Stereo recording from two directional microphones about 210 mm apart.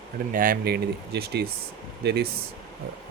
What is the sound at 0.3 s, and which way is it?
Speech, 45° right (ahead or behind).